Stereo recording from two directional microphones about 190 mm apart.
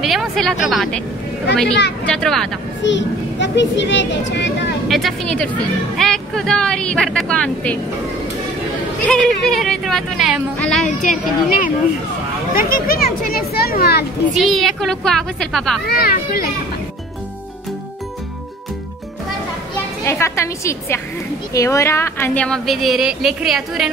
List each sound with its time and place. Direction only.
0.0 s speech: centre (ahead or behind)
2.0 s speech: 5° left (ahead or behind)
2.8 s speech: 70° left (ahead or behind)
4.8 s speech: centre (ahead or behind)
9.0 s speech: 5° left (ahead or behind)
11.0 s a child's voice: 45° left (ahead or behind)
14.3 s speech: centre (ahead or behind)
15.9 s a child's voice: 50° left (ahead or behind)
20.1 s a woman's voice: 15° left (ahead or behind); by 23.9 s centre (ahead or behind)